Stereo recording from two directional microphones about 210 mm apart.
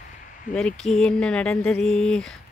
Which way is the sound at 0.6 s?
5° left (ahead or behind).